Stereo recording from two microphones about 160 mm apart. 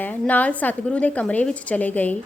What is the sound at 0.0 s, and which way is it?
A woman's voice, 10° left (ahead or behind).